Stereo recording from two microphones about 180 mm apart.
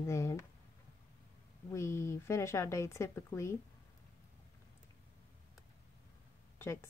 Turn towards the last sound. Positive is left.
turn(degrees=15)  # may be behind; listen again after turning